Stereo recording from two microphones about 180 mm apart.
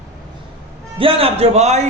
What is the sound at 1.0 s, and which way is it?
Speech, 30° right (ahead or behind).